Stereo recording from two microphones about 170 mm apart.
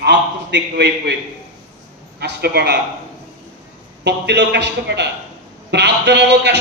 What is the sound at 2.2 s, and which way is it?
Speech, 70° right (ahead or behind).